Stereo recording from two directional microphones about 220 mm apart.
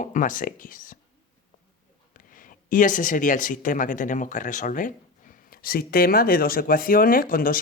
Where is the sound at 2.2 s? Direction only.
40° left (ahead or behind).